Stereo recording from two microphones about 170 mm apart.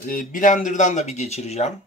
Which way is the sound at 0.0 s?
50° left (ahead or behind).